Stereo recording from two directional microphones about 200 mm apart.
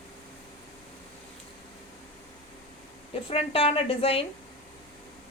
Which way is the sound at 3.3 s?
30° left (ahead or behind).